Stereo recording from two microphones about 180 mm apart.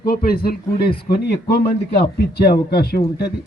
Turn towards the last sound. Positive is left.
turn(degrees=60)  # may be behind; listen again after turning